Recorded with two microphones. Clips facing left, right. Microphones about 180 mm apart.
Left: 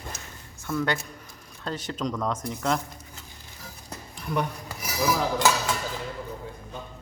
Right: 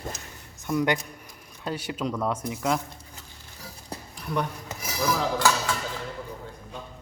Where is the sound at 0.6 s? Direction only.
15° right (ahead or behind).